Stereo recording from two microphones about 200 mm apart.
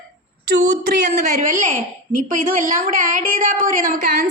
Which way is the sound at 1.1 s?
45° right (ahead or behind).